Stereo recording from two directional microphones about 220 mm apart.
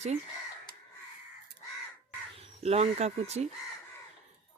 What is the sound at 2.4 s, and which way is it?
Speech, 30° right (ahead or behind).